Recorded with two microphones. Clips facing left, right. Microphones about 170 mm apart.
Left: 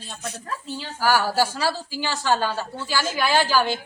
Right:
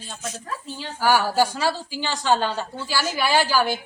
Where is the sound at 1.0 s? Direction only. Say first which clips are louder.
Right 1 dB; 15° right (ahead or behind).